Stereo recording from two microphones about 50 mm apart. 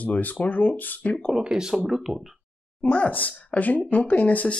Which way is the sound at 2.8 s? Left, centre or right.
Left.